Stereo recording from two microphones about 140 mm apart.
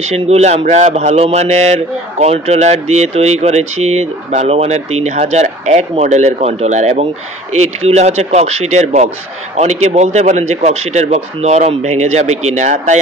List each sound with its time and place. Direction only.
0.0 s speech: 50° right (ahead or behind)